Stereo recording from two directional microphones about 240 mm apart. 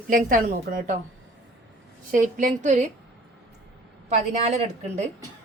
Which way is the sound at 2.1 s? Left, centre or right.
Right.